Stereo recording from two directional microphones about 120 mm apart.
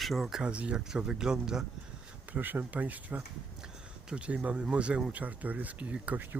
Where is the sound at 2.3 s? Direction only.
15° right (ahead or behind).